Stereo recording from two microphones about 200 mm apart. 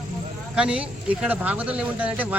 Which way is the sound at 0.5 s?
5° right (ahead or behind).